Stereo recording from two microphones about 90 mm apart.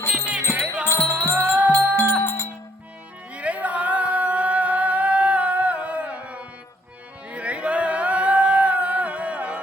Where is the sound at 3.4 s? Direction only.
15° right (ahead or behind).